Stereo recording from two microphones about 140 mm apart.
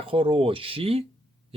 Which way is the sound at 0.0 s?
40° right (ahead or behind).